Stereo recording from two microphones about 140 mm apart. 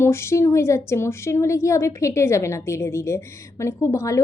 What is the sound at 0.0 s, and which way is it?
A woman's voice, 20° left (ahead or behind).